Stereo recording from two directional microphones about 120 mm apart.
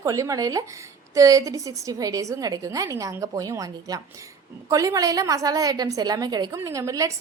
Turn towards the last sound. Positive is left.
turn(degrees=-25)  # may be behind; listen again after turning